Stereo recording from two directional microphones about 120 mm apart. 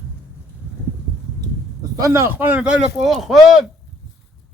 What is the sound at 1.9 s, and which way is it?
Speech, 25° right (ahead or behind).